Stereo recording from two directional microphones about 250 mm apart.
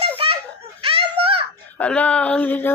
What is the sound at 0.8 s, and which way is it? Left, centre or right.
Children playing, right.